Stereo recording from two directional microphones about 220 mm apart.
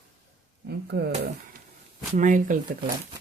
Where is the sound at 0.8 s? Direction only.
50° right (ahead or behind).